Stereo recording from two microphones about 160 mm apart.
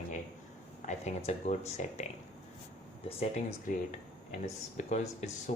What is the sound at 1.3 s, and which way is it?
Speech, 45° left (ahead or behind).